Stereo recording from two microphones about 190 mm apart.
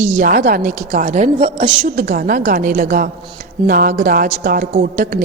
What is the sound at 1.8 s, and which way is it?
A woman's voice, 45° right (ahead or behind).